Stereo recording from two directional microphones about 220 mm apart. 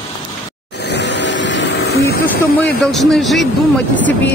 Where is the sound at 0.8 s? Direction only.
50° left (ahead or behind).